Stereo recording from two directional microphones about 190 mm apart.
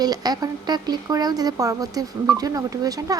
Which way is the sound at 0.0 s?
20° right (ahead or behind).